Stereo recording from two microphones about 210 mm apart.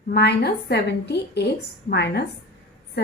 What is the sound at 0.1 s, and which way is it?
A woman's voice, 50° left (ahead or behind).